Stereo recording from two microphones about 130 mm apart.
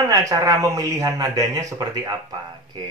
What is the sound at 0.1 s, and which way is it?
A man's voice, 25° right (ahead or behind).